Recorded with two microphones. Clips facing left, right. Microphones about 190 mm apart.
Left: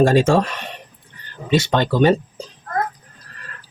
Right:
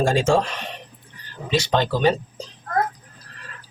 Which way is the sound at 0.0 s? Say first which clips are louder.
Left 4 dB; 60° left (ahead or behind).